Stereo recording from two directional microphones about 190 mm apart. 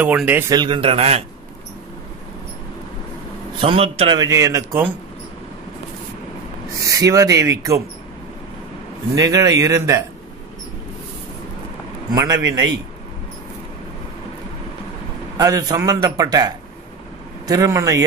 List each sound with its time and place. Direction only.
0.0 s speech: 10° right (ahead or behind)
0.6 s a man's voice: 25° right (ahead or behind)
3.5 s a man's voice: 30° right (ahead or behind)
4.2 s speech: 15° right (ahead or behind)
6.9 s speech: 15° right (ahead or behind)
9.1 s speech: 20° right (ahead or behind)
12.1 s a man's voice: 20° right (ahead or behind)
15.3 s a man's voice: 20° right (ahead or behind)